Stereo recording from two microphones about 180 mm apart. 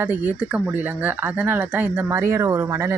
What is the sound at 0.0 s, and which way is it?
Speech, 10° right (ahead or behind).